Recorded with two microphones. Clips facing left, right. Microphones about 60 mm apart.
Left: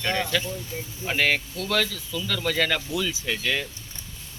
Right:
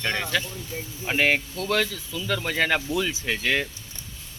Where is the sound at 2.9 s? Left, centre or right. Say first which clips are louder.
Right 2 dB; right.